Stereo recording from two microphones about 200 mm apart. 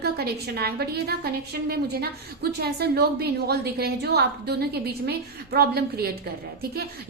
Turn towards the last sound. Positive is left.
turn(degrees=-50)  # may be behind; listen again after turning